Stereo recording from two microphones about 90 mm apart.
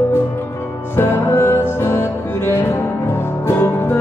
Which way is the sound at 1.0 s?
30° left (ahead or behind).